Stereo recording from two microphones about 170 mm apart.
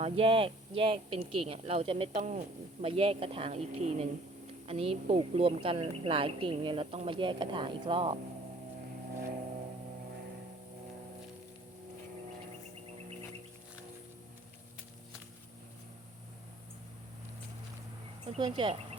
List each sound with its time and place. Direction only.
0.0 s a woman's voice: 35° right (ahead or behind)
18.3 s speech: 30° right (ahead or behind)